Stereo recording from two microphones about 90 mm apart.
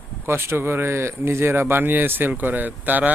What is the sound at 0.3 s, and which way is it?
Speech, 30° right (ahead or behind).